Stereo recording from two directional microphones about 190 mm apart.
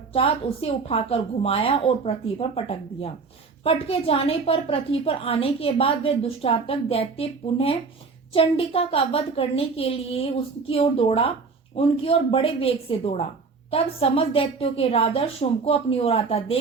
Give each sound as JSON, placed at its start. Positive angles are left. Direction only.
{"t": 0.1, "sound": "a woman's voice", "side_deg": 30}